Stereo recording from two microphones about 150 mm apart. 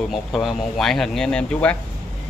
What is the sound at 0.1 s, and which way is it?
Speech, centre (ahead or behind).